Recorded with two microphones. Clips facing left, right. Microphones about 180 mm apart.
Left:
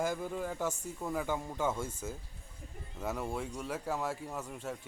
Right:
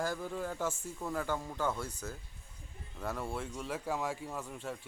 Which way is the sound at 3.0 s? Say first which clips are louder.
Left 2 dB; 5° left (ahead or behind).